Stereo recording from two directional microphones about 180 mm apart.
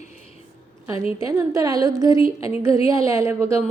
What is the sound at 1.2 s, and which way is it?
A woman's voice, 15° right (ahead or behind).